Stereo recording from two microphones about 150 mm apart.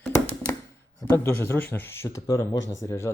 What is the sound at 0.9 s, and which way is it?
Speech, 20° left (ahead or behind).